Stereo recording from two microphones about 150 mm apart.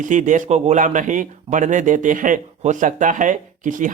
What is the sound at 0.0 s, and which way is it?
Speech, 55° right (ahead or behind).